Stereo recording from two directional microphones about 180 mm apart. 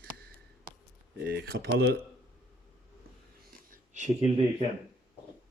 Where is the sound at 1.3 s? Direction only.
55° right (ahead or behind).